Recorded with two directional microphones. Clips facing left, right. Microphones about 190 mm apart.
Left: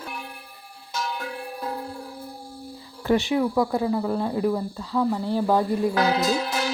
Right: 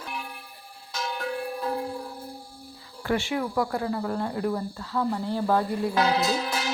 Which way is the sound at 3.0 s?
20° left (ahead or behind).